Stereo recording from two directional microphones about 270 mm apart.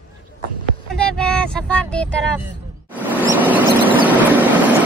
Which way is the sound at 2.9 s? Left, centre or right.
Centre.